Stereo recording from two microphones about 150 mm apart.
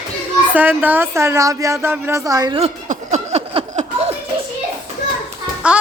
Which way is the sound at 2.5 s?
45° right (ahead or behind).